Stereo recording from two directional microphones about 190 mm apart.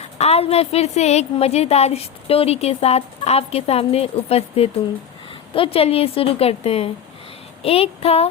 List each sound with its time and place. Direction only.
0.0 s a woman's voice: 35° left (ahead or behind)